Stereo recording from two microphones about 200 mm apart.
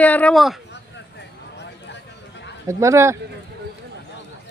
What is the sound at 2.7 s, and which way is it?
Speech, 15° right (ahead or behind).